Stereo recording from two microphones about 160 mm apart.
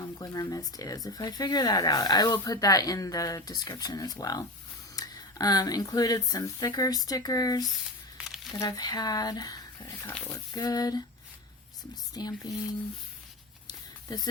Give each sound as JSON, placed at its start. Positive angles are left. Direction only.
{"t": 0.0, "sound": "speech", "side_deg": 25}
{"t": 8.2, "sound": "squish", "side_deg": -5}
{"t": 8.5, "sound": "speech", "side_deg": 25}
{"t": 10.1, "sound": "speech", "side_deg": 15}
{"t": 10.5, "sound": "speech", "side_deg": 25}
{"t": 12.1, "sound": "speech", "side_deg": 25}